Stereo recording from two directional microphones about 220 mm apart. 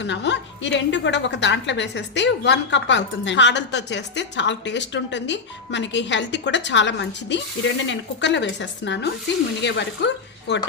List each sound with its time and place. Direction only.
0.0 s a woman's voice: 55° left (ahead or behind)